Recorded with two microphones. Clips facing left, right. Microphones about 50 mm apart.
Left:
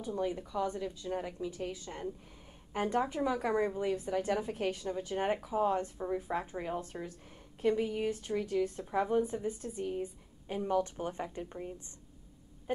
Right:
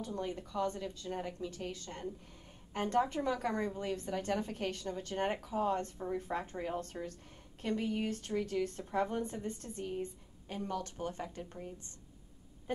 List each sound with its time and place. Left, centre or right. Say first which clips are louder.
0.0 s a woman's voice: left 4 dB; centre